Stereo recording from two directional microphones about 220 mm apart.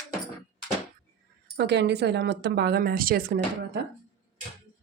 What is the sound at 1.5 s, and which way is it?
Speech, 50° right (ahead or behind).